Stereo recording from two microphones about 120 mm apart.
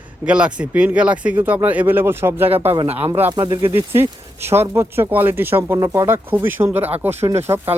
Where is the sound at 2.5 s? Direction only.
55° right (ahead or behind).